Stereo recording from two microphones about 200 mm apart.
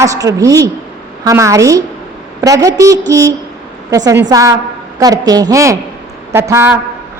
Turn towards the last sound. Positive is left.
turn(degrees=-10)  # may be behind; listen again after turning